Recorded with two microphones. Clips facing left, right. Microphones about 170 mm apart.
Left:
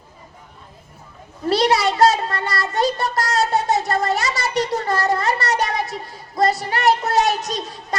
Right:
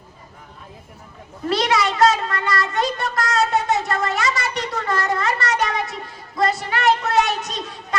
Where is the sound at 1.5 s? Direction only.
35° left (ahead or behind).